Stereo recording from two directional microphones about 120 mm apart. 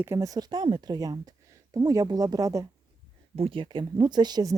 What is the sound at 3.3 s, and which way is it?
A woman's voice, 50° right (ahead or behind).